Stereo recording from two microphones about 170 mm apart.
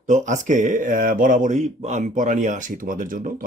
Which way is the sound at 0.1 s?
50° right (ahead or behind).